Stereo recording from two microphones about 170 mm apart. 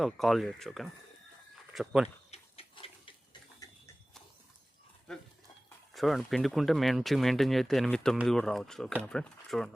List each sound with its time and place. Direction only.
0.0 s speech: centre (ahead or behind)
2.3 s a sound: 35° left (ahead or behind)
5.1 s speech: 5° left (ahead or behind)